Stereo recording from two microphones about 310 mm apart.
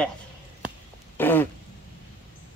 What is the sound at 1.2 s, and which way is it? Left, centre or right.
Throat clearing, centre.